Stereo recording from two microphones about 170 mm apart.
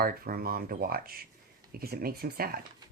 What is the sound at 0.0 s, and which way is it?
Speech, 60° right (ahead or behind).